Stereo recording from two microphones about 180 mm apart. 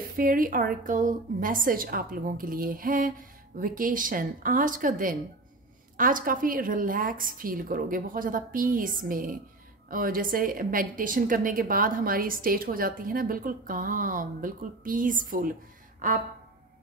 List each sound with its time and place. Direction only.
0.2 s a woman's voice: 50° right (ahead or behind)